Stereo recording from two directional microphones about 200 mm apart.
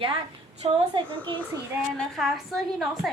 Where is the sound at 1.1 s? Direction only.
10° left (ahead or behind).